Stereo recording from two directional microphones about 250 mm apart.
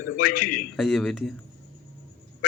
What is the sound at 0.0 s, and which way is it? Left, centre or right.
Speech, left.